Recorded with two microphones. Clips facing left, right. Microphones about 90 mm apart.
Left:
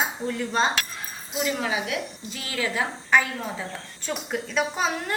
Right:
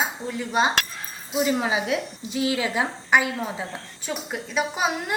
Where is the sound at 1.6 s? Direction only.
25° right (ahead or behind).